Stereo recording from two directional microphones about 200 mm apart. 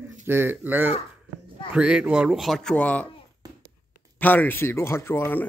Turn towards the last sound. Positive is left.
turn(degrees=10)  # may be behind; listen again after turning